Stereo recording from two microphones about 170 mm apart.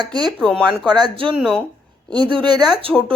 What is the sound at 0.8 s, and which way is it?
Speech, 25° right (ahead or behind).